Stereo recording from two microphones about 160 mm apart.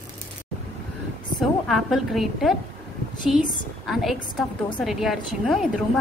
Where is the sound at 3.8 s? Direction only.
Centre (ahead or behind).